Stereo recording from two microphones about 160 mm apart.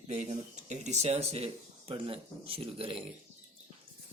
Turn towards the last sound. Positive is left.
turn(degrees=-35)  # may be behind; listen again after turning